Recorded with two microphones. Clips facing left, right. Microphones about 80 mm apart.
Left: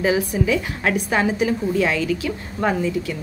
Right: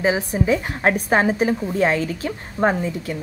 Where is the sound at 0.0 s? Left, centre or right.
Right.